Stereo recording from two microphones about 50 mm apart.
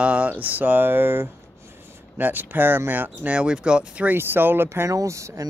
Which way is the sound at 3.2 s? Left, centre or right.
Right.